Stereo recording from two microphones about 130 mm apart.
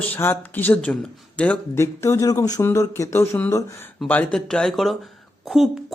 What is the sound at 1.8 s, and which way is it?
Speech, 20° left (ahead or behind).